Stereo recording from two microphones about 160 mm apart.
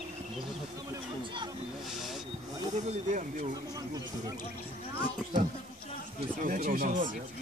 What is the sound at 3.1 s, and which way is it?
Speech, 55° right (ahead or behind).